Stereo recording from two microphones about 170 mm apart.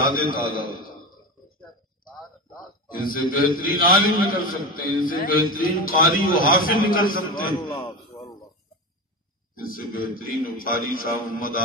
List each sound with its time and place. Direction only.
0.0 s a man's voice: 55° left (ahead or behind)
3.3 s a man's voice: 55° left (ahead or behind)
7.5 s speech: 20° left (ahead or behind)
9.6 s a man's voice: 55° left (ahead or behind)